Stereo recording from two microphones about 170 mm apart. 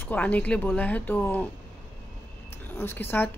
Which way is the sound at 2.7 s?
10° left (ahead or behind).